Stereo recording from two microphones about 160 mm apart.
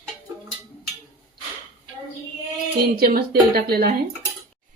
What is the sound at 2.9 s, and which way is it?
Speech, 75° right (ahead or behind).